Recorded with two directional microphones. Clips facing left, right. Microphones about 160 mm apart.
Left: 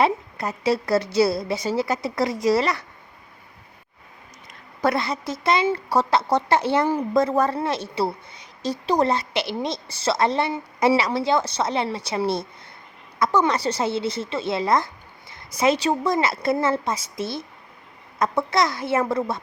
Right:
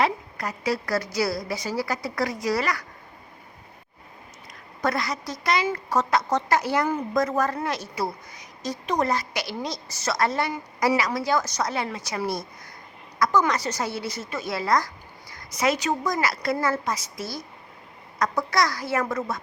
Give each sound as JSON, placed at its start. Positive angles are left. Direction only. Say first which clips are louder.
{"t": 0.0, "sound": "a woman's voice", "louder": "left 3 dB", "side_deg": 25}
{"t": 4.8, "sound": "a woman's voice", "louder": "left 4 dB", "side_deg": 25}